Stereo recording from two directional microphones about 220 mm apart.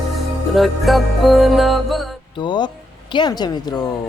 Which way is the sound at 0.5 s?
Centre (ahead or behind).